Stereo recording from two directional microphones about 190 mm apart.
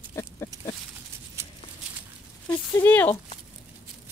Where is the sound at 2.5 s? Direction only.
10° left (ahead or behind).